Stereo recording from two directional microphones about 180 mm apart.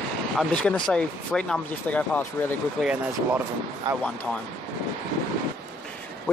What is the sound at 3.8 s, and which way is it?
Speech, 20° right (ahead or behind).